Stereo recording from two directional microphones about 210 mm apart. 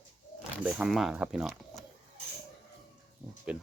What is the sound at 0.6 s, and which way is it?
Speech, centre (ahead or behind).